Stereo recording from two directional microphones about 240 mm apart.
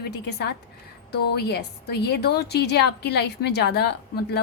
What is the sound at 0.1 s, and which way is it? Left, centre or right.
A woman's voice, left.